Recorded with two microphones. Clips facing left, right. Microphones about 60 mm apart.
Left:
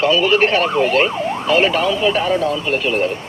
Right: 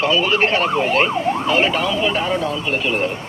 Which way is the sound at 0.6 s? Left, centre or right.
Left.